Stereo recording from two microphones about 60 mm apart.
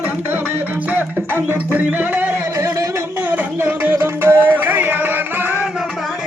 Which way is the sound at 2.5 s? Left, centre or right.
Right.